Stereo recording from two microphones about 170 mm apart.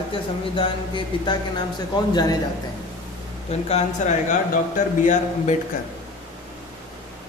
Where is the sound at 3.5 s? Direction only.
40° left (ahead or behind).